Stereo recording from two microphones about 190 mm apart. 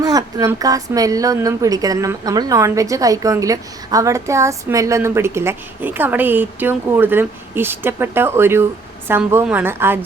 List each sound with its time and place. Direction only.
0.0 s a woman's voice: 20° right (ahead or behind)